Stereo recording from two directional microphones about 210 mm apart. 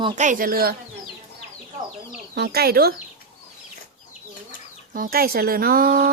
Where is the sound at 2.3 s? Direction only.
50° right (ahead or behind).